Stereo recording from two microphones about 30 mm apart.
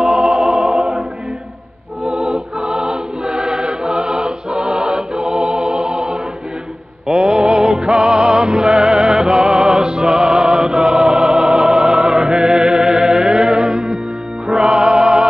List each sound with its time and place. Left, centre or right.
0.0 s music: right
2.0 s music: centre
2.3 s music: right